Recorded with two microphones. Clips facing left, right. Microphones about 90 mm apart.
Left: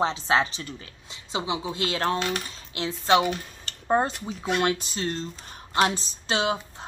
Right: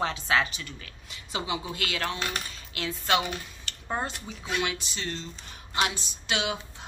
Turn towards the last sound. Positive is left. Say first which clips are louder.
# left 5 dB
turn(degrees=35)  # may be behind; listen again after turning